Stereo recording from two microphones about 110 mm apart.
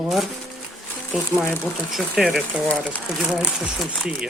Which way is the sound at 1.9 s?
Centre (ahead or behind).